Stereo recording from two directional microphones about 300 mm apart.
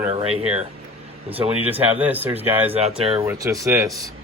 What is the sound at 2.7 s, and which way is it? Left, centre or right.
Speech, centre.